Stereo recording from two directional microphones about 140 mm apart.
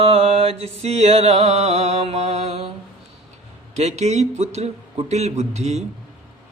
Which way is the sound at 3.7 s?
55° right (ahead or behind).